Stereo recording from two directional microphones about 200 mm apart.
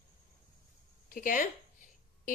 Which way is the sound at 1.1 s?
40° left (ahead or behind).